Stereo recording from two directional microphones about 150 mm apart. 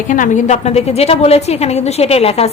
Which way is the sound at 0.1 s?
55° left (ahead or behind).